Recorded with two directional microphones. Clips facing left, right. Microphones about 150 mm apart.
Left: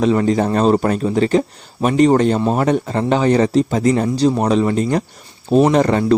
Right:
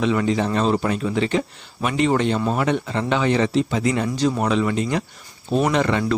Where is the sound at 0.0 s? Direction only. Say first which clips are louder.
Left 5 dB; 40° left (ahead or behind).